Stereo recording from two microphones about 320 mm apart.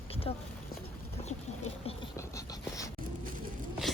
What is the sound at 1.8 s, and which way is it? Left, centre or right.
Speech, centre.